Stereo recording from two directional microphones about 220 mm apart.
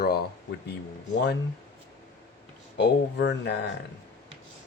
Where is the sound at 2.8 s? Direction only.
50° left (ahead or behind).